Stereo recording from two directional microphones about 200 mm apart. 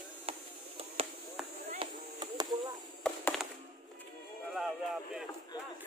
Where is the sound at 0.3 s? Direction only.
30° right (ahead or behind).